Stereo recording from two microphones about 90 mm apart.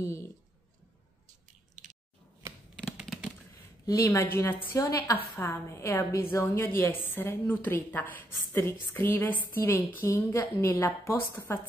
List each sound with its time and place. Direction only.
0.0 s a woman's voice: 30° left (ahead or behind)
3.8 s a woman's voice: 35° left (ahead or behind)
5.4 s a woman's voice: 20° left (ahead or behind)